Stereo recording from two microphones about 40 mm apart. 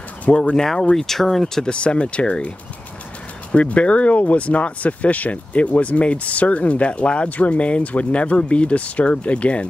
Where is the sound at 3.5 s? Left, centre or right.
Left.